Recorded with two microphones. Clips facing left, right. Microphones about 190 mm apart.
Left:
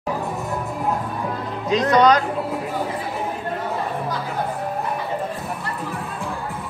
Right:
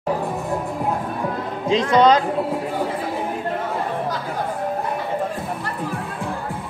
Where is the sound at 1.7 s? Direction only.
25° right (ahead or behind).